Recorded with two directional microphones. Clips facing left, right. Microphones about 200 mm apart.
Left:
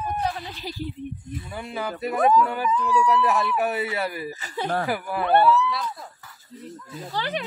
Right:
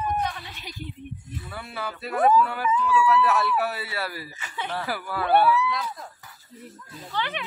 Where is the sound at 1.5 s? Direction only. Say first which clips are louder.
Left 4 dB; 15° left (ahead or behind).